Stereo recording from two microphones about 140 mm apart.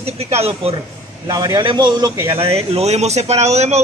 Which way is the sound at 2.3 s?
45° right (ahead or behind).